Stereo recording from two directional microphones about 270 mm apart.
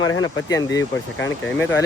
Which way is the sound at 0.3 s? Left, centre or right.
Centre.